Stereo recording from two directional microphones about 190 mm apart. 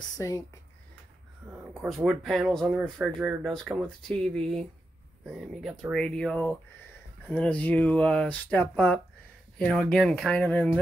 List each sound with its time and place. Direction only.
0.2 s speech: 15° left (ahead or behind)
1.7 s speech: 10° right (ahead or behind); by 10.8 s 10° left (ahead or behind)